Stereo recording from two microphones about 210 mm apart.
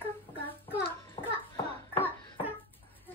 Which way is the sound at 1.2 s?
25° left (ahead or behind).